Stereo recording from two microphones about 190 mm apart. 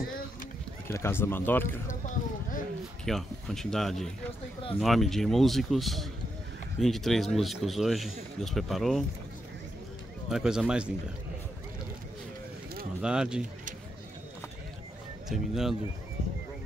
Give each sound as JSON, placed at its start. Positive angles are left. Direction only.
{"t": 0.8, "sound": "speech", "side_deg": 10}
{"t": 1.9, "sound": "a sound", "side_deg": 45}
{"t": 3.1, "sound": "speech", "side_deg": 0}
{"t": 10.3, "sound": "speech", "side_deg": -5}
{"t": 13.0, "sound": "speech", "side_deg": -5}
{"t": 15.2, "sound": "speech", "side_deg": 0}